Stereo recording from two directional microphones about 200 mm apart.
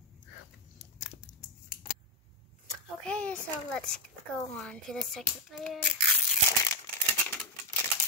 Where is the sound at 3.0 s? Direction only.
5° left (ahead or behind).